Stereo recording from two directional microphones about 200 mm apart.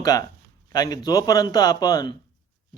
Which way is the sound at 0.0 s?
20° left (ahead or behind).